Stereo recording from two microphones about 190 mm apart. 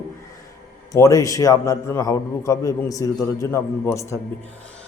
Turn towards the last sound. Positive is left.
turn(degrees=15)  # may be behind; listen again after turning